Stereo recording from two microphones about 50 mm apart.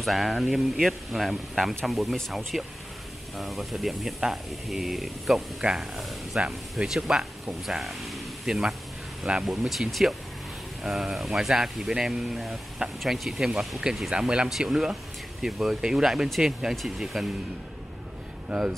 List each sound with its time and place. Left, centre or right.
0.0 s speech: centre
5.6 s speech: centre
5.9 s speech: centre
6.9 s speech: centre
9.3 s speech: right
9.7 s speech: centre